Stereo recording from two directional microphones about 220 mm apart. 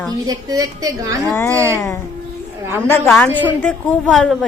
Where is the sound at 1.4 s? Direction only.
10° left (ahead or behind).